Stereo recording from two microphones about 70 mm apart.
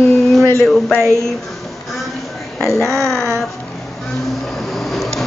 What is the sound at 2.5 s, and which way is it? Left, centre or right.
Speech, centre.